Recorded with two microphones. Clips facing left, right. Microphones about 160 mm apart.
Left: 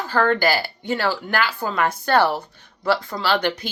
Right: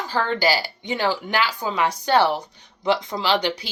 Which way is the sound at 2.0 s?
15° right (ahead or behind).